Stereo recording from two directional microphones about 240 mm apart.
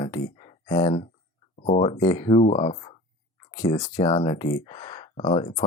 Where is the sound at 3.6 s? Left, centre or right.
Centre.